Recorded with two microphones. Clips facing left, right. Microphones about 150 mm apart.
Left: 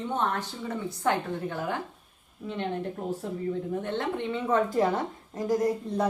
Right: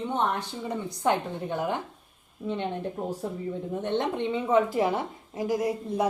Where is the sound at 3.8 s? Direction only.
20° right (ahead or behind).